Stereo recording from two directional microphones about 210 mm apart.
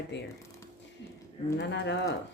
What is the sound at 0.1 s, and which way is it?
Speech, 60° left (ahead or behind).